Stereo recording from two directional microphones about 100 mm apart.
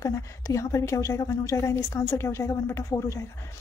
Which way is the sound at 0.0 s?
35° left (ahead or behind).